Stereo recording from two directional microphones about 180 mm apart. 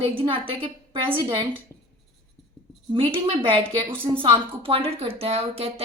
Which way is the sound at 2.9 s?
30° right (ahead or behind).